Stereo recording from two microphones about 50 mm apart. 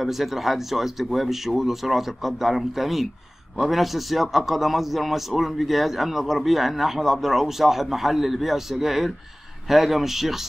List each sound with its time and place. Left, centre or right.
0.0 s a man's voice: centre